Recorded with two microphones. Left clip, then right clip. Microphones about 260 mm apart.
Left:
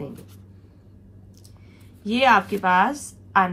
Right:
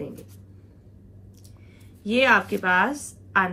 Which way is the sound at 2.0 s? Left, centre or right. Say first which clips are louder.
Left 2 dB; centre.